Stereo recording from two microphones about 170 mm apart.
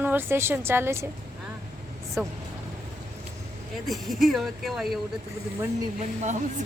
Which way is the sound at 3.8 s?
Centre (ahead or behind).